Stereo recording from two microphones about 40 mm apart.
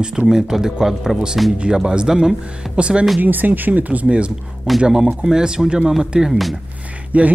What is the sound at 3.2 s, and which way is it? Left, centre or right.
Speech, right.